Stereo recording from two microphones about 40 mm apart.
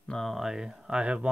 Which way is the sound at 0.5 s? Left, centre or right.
Centre.